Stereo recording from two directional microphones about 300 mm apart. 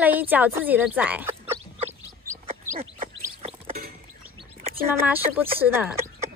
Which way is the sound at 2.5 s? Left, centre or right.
Right.